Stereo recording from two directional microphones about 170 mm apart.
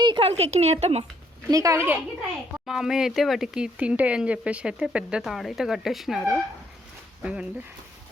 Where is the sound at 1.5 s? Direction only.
20° right (ahead or behind).